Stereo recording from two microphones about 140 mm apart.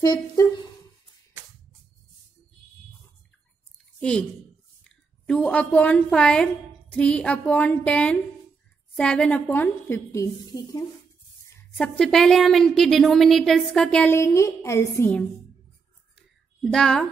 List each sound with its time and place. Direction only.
0.0 s speech: 30° left (ahead or behind)
4.0 s a woman's voice: 5° left (ahead or behind); by 10.8 s 25° left (ahead or behind)
11.7 s a woman's voice: 5° left (ahead or behind)
16.6 s a woman's voice: 5° left (ahead or behind)